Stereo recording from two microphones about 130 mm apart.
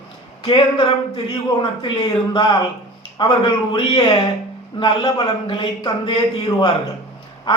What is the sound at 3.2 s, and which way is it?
A man's voice, 40° left (ahead or behind).